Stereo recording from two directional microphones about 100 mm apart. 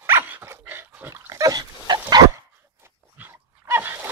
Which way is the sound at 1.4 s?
45° right (ahead or behind).